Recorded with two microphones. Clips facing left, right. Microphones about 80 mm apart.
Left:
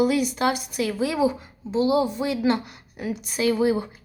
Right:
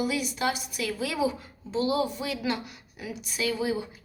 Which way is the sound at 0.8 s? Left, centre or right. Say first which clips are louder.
Left 5 dB; left.